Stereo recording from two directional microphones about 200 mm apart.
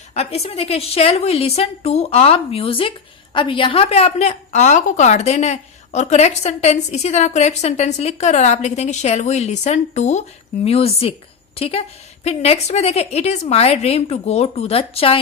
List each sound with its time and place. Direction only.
0.1 s a woman's voice: 30° left (ahead or behind)